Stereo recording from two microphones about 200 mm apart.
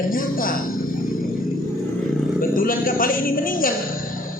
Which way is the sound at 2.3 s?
45° left (ahead or behind).